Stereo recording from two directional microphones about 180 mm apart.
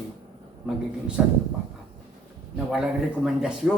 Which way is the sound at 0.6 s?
5° right (ahead or behind).